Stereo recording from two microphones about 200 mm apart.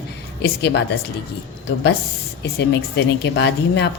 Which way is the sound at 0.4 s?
55° left (ahead or behind).